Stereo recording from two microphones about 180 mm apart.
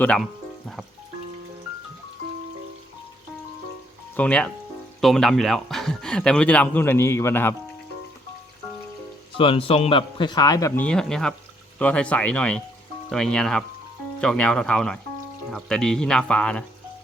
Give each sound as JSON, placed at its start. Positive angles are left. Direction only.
{"t": 0.0, "sound": "speech", "side_deg": 5}
{"t": 4.2, "sound": "speech", "side_deg": 5}
{"t": 9.4, "sound": "a man's voice", "side_deg": 30}